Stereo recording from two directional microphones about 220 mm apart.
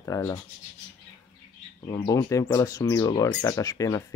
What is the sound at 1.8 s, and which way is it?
Speech, 20° left (ahead or behind).